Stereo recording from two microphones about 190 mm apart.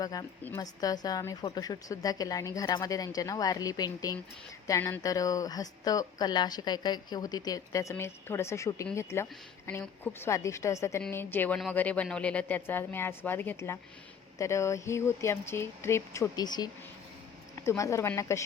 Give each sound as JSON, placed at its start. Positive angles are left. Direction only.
{"t": 0.0, "sound": "speech", "side_deg": 20}
{"t": 17.7, "sound": "speech", "side_deg": 15}